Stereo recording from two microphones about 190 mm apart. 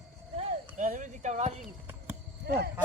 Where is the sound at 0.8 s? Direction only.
40° right (ahead or behind).